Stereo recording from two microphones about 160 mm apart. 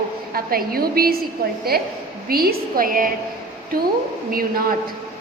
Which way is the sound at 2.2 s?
70° right (ahead or behind).